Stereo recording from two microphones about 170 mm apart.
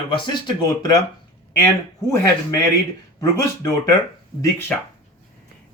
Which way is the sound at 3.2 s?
20° left (ahead or behind).